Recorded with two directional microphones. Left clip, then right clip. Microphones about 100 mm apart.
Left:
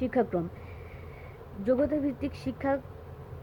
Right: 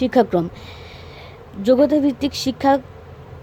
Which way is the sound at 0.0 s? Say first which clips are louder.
Right 12 dB; 80° right.